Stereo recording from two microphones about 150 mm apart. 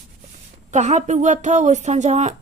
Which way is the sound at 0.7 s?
50° right (ahead or behind).